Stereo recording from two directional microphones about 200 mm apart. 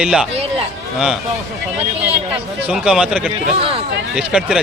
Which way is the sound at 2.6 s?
5° right (ahead or behind).